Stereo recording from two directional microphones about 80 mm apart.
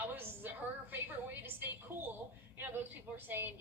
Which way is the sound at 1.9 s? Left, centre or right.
Right.